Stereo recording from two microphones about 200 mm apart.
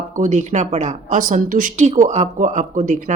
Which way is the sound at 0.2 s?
35° right (ahead or behind).